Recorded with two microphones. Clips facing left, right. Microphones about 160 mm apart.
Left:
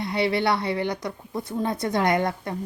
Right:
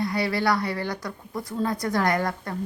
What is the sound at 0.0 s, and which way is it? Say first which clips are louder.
A woman's voice: left 1 dB; 25° left (ahead or behind).